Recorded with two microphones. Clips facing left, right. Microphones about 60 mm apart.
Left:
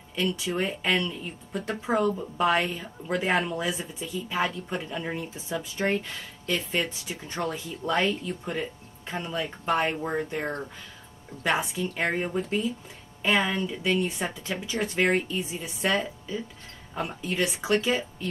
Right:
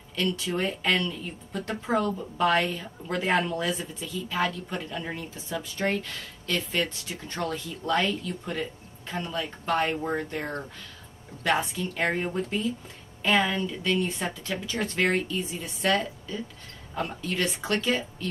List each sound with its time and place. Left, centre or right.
0.1 s a woman's voice: centre